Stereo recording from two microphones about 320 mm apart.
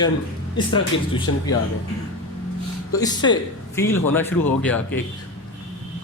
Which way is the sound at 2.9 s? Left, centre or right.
Centre.